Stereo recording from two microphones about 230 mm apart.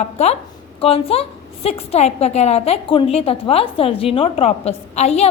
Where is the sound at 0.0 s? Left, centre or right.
Left.